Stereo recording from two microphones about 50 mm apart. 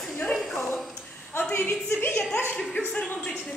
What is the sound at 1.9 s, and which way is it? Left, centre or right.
Speech, left.